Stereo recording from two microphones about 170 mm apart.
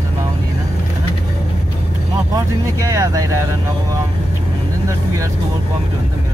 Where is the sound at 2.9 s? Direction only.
20° right (ahead or behind).